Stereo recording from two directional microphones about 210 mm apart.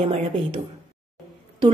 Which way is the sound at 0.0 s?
25° right (ahead or behind).